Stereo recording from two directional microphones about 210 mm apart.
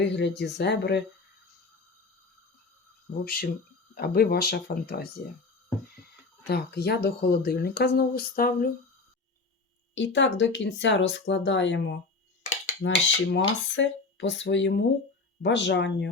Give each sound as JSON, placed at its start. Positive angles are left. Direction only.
{"t": 0.0, "sound": "speech", "side_deg": 55}
{"t": 3.2, "sound": "speech", "side_deg": 45}
{"t": 6.5, "sound": "speech", "side_deg": 50}
{"t": 9.9, "sound": "speech", "side_deg": 60}